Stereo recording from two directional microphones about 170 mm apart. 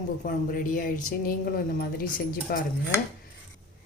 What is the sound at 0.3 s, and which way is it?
A woman's voice, 55° left (ahead or behind).